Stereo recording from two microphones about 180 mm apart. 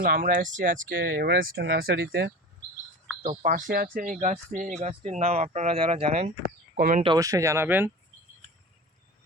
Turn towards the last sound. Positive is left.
turn(degrees=-10)  # may be behind; listen again after turning